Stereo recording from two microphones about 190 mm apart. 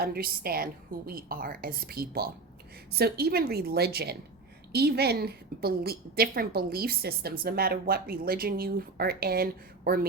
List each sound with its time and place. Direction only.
0.0 s a woman's voice: 50° right (ahead or behind)